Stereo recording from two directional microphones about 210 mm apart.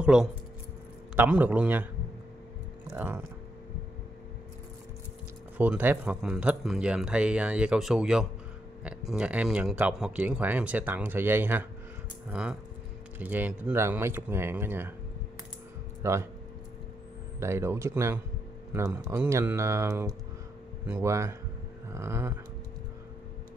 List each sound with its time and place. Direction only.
0.0 s speech: 5° right (ahead or behind)
2.9 s speech: 10° right (ahead or behind)
5.6 s speech: 10° right (ahead or behind)
16.0 s speech: 15° right (ahead or behind)
17.4 s speech: 10° right (ahead or behind)